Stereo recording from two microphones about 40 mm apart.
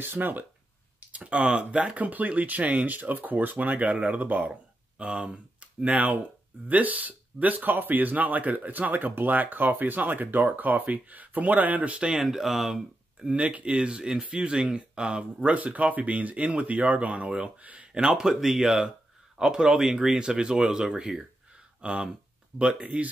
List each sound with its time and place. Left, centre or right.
0.0 s speech: right
1.1 s speech: right
3.9 s speech: right
4.2 s a sound: right
5.0 s speech: right
5.9 s speech: right
12.1 s speech: centre
13.3 s speech: right
15.5 s speech: right
17.9 s speech: centre